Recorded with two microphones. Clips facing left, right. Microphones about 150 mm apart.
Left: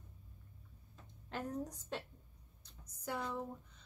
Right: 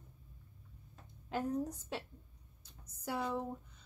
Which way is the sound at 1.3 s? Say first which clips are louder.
Right 5 dB; 5° right (ahead or behind).